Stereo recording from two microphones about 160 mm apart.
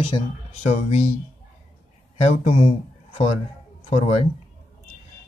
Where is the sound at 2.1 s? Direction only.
35° left (ahead or behind).